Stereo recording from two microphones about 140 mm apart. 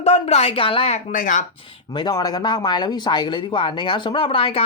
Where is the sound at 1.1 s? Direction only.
65° left (ahead or behind).